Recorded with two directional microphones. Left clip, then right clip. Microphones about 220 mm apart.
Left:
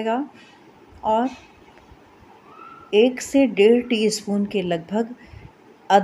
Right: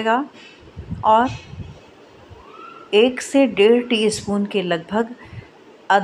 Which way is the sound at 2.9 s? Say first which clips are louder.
Right 2 dB; 15° left (ahead or behind).